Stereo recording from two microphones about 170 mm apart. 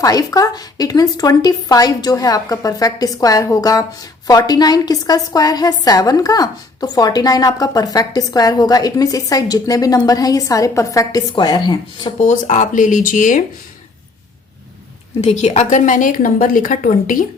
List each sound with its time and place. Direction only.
0.0 s a woman's voice: 20° left (ahead or behind)
12.2 s a woman's voice: 50° left (ahead or behind)
15.2 s a woman's voice: 40° left (ahead or behind)